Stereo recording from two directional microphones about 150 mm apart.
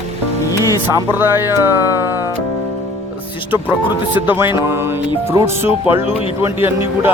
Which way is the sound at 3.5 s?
10° right (ahead or behind).